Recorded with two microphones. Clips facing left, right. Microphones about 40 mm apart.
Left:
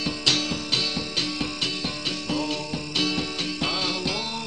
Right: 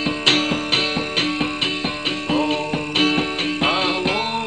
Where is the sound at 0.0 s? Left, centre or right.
Right.